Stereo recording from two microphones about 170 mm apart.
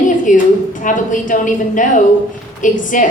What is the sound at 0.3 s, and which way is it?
A woman's voice, 50° left (ahead or behind).